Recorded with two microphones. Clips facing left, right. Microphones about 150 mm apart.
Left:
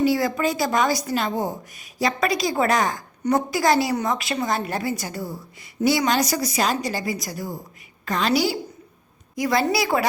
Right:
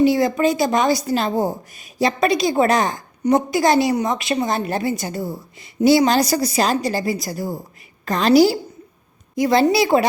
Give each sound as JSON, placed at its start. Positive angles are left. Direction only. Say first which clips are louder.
{"t": 0.0, "sound": "a woman's voice", "louder": "right 5 dB", "side_deg": -20}